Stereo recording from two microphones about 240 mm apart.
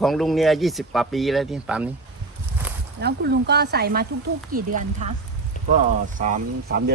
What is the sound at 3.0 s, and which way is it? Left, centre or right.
Speech, right.